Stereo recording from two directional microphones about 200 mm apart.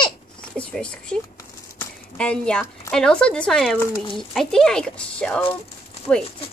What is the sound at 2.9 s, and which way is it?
A woman's voice, 5° left (ahead or behind).